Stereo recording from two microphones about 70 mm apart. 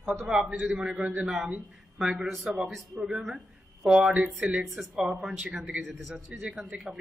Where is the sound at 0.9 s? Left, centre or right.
Centre.